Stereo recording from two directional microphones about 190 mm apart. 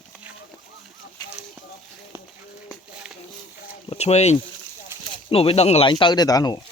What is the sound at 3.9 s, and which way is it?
Speech, 35° left (ahead or behind).